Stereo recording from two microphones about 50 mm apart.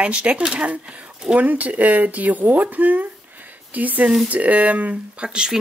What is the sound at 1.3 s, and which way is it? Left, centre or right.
Speech, right.